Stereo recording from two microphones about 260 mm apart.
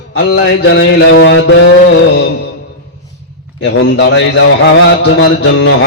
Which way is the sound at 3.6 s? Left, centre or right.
Left.